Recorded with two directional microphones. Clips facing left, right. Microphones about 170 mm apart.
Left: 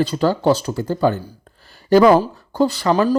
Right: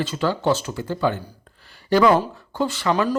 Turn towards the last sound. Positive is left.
turn(degrees=35)  # may be behind; listen again after turning